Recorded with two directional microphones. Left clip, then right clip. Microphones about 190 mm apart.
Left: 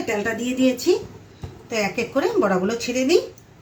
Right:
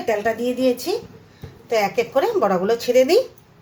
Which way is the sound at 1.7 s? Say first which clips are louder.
Right 4 dB; 55° right (ahead or behind).